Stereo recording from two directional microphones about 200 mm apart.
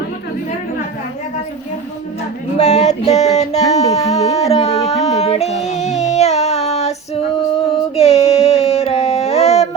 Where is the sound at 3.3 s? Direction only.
35° left (ahead or behind).